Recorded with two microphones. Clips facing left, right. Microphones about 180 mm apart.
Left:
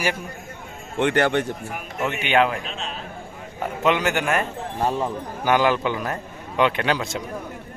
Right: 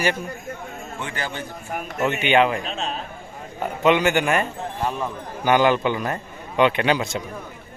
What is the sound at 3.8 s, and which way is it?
Speech, centre (ahead or behind).